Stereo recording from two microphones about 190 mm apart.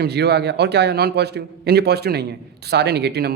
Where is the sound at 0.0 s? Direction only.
60° right (ahead or behind).